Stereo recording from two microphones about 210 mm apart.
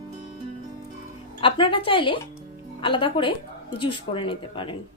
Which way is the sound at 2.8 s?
25° left (ahead or behind).